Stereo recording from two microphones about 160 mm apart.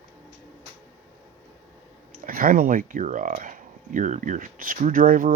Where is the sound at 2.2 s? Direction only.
60° right (ahead or behind).